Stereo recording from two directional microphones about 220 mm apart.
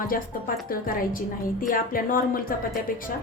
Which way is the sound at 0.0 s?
40° left (ahead or behind).